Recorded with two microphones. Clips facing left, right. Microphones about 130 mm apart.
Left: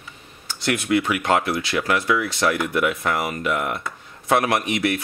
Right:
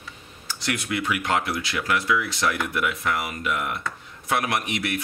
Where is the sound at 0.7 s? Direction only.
50° left (ahead or behind).